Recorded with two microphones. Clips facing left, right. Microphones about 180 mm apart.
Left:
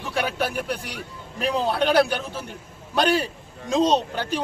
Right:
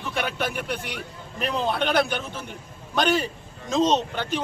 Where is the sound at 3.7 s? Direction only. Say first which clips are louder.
Left 1 dB; 35° left (ahead or behind).